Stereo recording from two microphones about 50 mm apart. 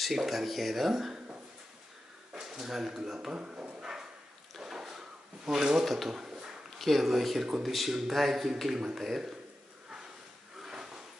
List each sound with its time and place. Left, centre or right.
0.0 s speech: centre
2.3 s speech: centre
3.3 s speech: right
4.6 s drawer open or close: centre
5.9 s speech: centre
6.1 s a sound: centre
6.8 s a man's voice: centre
10.6 s drawer open or close: centre